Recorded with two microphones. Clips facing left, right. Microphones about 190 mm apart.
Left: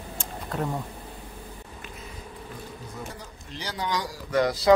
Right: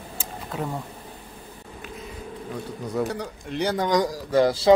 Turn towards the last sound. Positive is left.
turn(degrees=-30)  # may be behind; listen again after turning